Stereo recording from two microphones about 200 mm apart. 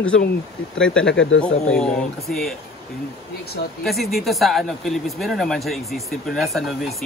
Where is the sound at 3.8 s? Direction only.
Centre (ahead or behind).